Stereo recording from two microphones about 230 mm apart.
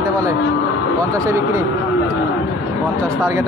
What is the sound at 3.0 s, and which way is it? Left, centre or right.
Speech, centre.